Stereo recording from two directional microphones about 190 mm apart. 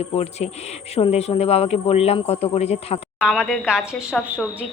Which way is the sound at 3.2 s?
5° right (ahead or behind).